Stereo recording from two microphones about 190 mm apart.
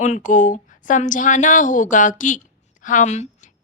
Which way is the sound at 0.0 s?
40° left (ahead or behind).